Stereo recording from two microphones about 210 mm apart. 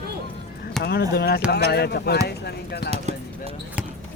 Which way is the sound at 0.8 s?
50° left (ahead or behind).